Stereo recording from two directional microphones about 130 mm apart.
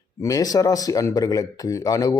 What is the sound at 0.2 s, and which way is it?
Speech, 30° left (ahead or behind).